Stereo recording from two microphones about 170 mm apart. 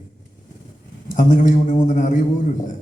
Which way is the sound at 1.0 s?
50° left (ahead or behind).